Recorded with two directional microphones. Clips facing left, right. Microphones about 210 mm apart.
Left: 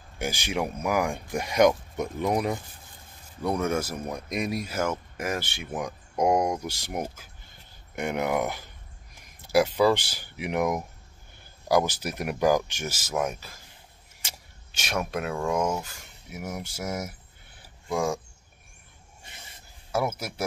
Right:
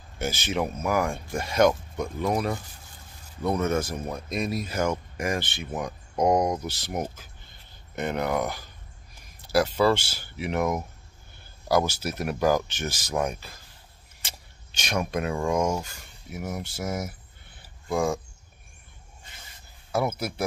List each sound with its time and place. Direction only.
0.2 s speech: 15° left (ahead or behind)
10.6 s speech: centre (ahead or behind)
11.6 s speech: 15° left (ahead or behind)
14.7 s speech: 5° left (ahead or behind)
19.9 s speech: 10° left (ahead or behind)